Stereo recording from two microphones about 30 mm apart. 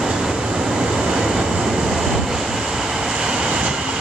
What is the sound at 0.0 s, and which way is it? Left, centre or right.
Train, centre.